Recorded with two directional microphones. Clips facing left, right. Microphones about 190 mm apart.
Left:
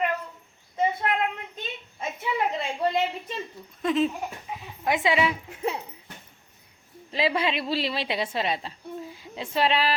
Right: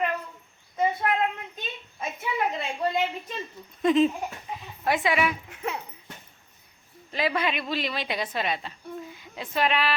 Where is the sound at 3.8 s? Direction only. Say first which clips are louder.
Right 3 dB; centre (ahead or behind); by 5.3 s 25° left (ahead or behind).